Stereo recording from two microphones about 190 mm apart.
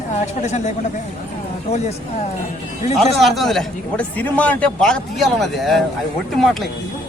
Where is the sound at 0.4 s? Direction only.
35° left (ahead or behind).